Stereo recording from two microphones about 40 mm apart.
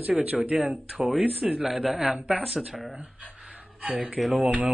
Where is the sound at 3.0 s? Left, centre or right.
Right.